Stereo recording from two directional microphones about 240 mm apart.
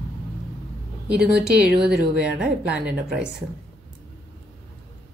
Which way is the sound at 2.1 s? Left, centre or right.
Centre.